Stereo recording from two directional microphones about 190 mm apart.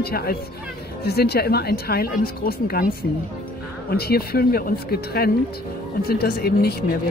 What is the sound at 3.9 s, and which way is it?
Speech, 55° left (ahead or behind).